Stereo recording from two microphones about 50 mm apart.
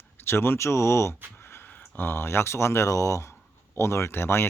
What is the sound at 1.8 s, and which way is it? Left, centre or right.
Speech, left.